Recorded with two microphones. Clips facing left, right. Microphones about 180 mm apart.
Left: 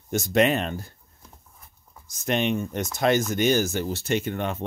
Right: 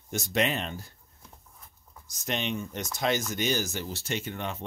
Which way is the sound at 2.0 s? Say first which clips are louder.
Left 7 dB; 55° left (ahead or behind).